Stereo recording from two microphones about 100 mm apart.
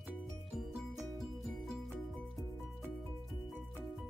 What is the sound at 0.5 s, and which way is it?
Music, centre (ahead or behind).